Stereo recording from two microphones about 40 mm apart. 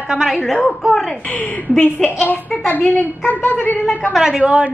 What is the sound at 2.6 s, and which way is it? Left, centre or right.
A woman's voice, left.